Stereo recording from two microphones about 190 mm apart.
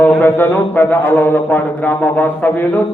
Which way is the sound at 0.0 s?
10° left (ahead or behind).